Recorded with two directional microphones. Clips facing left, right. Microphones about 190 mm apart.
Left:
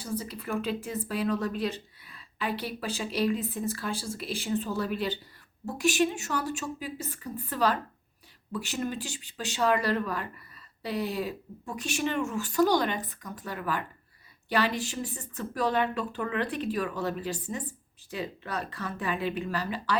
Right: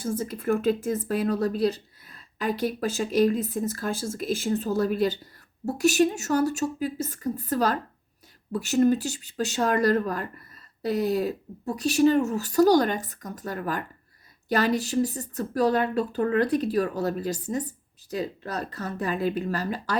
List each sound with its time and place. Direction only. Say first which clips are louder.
0.0 s speech: right 6 dB; 45° right (ahead or behind)